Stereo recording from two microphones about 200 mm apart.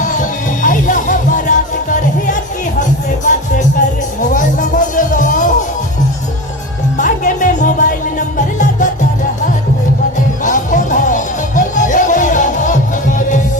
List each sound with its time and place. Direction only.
0.0 s music: 40° left (ahead or behind)
6.9 s music: 40° left (ahead or behind)
10.4 s music: 40° left (ahead or behind)